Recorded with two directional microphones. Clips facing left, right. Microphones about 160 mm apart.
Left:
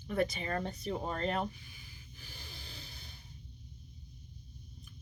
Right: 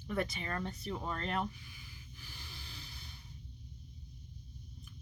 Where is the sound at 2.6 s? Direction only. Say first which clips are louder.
Left 1 dB; 25° left (ahead or behind).